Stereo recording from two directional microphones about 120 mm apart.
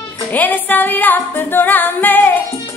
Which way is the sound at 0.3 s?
15° left (ahead or behind).